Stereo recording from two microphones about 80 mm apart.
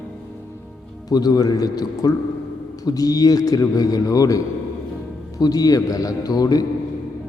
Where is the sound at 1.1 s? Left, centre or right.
Left.